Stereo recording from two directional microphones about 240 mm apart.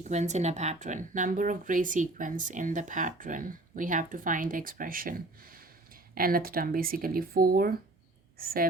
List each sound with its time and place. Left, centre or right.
0.0 s speech: right